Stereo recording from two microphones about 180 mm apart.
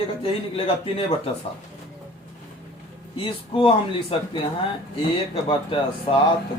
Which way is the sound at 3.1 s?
30° left (ahead or behind).